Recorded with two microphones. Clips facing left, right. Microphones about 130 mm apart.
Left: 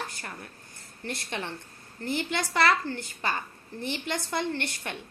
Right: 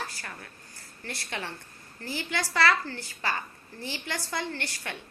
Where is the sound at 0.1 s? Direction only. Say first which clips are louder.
Left 1 dB; 20° left (ahead or behind).